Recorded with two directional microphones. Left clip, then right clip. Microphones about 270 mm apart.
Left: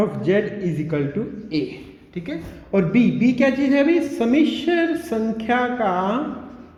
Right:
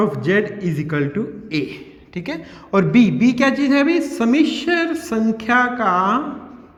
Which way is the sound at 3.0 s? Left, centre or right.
Right.